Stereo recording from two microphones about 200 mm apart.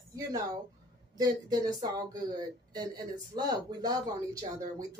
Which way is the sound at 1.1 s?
20° right (ahead or behind).